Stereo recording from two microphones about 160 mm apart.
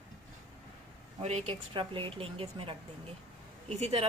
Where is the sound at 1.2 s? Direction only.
40° right (ahead or behind).